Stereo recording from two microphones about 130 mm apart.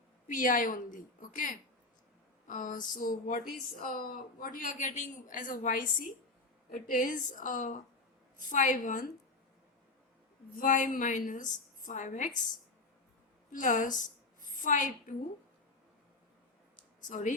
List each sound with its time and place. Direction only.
0.3 s speech: 90° left
10.5 s speech: 85° left
13.5 s a woman's voice: 90° left
17.1 s speech: 75° left (ahead or behind)